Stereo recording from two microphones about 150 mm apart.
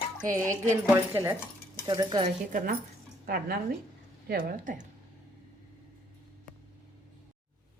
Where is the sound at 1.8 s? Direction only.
30° right (ahead or behind).